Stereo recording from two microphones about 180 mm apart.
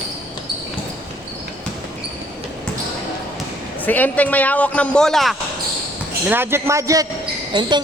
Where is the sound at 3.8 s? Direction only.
10° left (ahead or behind).